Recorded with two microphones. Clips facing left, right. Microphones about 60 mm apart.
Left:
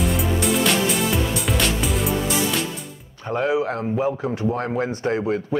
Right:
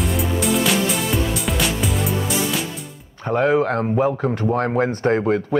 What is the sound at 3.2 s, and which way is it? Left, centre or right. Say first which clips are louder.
Speech: right 4 dB; right.